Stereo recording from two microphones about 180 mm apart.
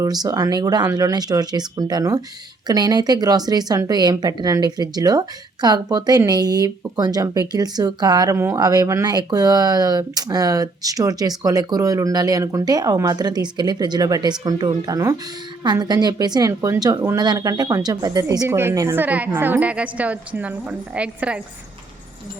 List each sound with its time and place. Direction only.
0.0 s a woman's voice: 20° right (ahead or behind)